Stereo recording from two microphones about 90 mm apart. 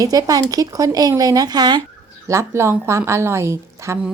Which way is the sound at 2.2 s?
30° right (ahead or behind).